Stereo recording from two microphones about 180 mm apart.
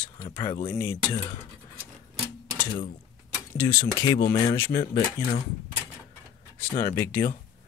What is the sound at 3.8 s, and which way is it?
Speech, 25° left (ahead or behind).